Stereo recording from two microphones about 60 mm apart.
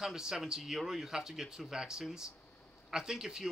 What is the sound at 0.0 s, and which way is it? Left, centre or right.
Speech, centre.